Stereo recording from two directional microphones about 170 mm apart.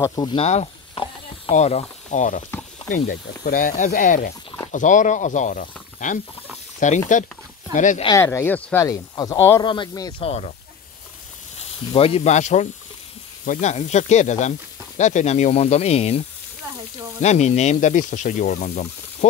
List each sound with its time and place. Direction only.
0.0 s speech: 25° left (ahead or behind)
0.4 s mechanisms: 40° left (ahead or behind)
1.5 s speech: 40° left (ahead or behind)
2.9 s speech: 60° left (ahead or behind)
8.2 s speech: 15° left (ahead or behind)
8.8 s speech: 20° left (ahead or behind)
10.2 s speech: 40° left (ahead or behind)
11.5 s speech: 35° left (ahead or behind)
17.2 s speech: 45° left (ahead or behind)